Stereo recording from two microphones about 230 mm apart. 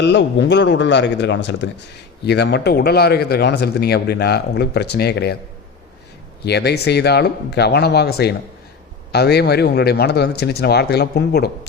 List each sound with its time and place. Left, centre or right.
0.0 s speech: left
6.4 s speech: left